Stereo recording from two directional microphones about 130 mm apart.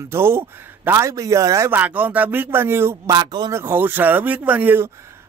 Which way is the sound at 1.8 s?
10° right (ahead or behind).